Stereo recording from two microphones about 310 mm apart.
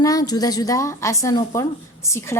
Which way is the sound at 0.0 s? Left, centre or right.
Centre.